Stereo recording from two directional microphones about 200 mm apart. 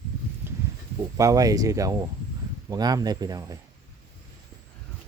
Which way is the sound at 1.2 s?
15° right (ahead or behind).